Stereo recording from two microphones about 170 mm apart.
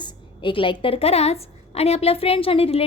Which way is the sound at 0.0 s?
30° left (ahead or behind).